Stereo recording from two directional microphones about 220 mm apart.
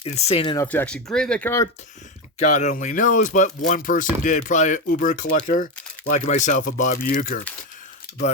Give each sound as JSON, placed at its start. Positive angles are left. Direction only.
{"t": 0.0, "sound": "speech", "side_deg": 25}
{"t": 2.4, "sound": "speech", "side_deg": 30}